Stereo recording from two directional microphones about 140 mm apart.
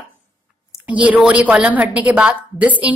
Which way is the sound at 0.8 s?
10° right (ahead or behind).